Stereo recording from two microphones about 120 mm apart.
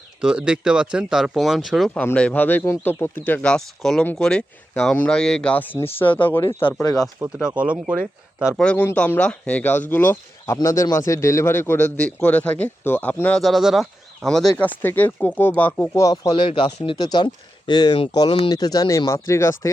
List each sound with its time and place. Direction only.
0.2 s speech: 5° right (ahead or behind)
1.9 s speech: 10° left (ahead or behind)
7.3 s speech: 10° right (ahead or behind)
8.5 s speech: 10° left (ahead or behind)
13.4 s speech: centre (ahead or behind)
14.8 s speech: 15° left (ahead or behind)
16.0 s speech: 30° left (ahead or behind)
16.3 s speech: 45° left (ahead or behind); by 19.7 s 25° left (ahead or behind)